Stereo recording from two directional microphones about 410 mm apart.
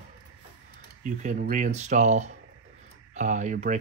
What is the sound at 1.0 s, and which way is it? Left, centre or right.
Speech, centre.